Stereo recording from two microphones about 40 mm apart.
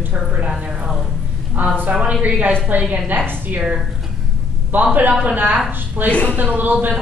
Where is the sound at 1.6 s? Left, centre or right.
Right.